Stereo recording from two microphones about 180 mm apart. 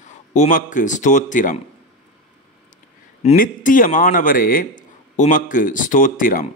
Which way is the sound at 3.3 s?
50° left (ahead or behind).